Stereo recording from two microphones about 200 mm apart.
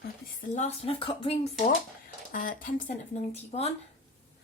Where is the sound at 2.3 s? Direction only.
45° left (ahead or behind).